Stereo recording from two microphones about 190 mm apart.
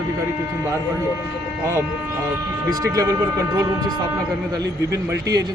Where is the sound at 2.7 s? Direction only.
20° right (ahead or behind).